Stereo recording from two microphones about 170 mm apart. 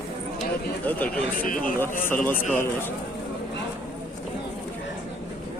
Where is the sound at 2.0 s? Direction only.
10° left (ahead or behind).